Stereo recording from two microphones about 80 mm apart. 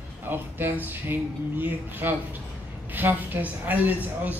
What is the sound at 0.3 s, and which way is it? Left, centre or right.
A man's voice, right.